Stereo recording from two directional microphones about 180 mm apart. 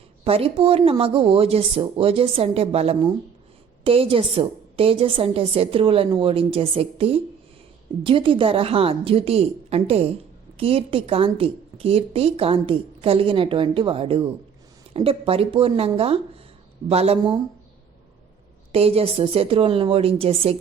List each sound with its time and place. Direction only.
0.3 s a woman's voice: 30° right (ahead or behind)
18.7 s a woman's voice: 35° right (ahead or behind)